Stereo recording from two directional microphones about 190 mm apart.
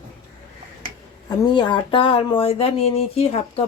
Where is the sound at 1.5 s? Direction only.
25° left (ahead or behind).